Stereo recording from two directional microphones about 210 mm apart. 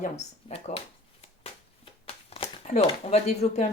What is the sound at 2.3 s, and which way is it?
Speech, 30° left (ahead or behind).